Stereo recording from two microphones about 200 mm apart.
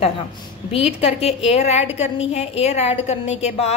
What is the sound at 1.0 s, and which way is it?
A woman's voice, 30° left (ahead or behind).